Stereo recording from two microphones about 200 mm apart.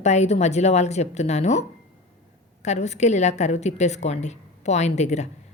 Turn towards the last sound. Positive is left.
turn(degrees=35)  # may be behind; listen again after turning